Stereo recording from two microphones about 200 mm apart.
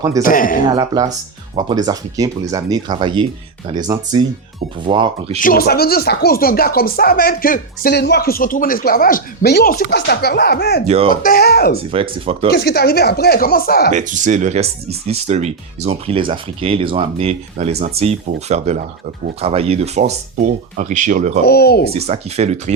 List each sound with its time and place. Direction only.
0.2 s speech: 45° left (ahead or behind)
0.7 s speech: 20° right (ahead or behind)
5.4 s speech: 45° left (ahead or behind)
10.8 s speech: 30° right (ahead or behind)
11.1 s speech: 45° left (ahead or behind)
11.9 s speech: 25° right (ahead or behind)
12.5 s speech: 55° left (ahead or behind)
13.9 s speech: 40° right (ahead or behind)
21.4 s speech: 50° left (ahead or behind)
21.9 s speech: 30° right (ahead or behind)